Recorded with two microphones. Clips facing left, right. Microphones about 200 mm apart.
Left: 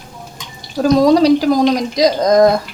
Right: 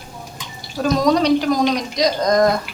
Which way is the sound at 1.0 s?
30° left (ahead or behind).